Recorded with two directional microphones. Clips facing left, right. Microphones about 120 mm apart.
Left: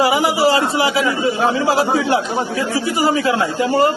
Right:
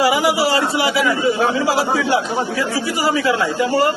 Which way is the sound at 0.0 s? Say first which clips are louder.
Left 1 dB; 25° left (ahead or behind).